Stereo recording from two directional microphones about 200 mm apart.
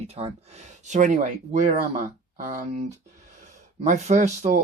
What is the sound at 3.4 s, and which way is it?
Speech, 35° right (ahead or behind).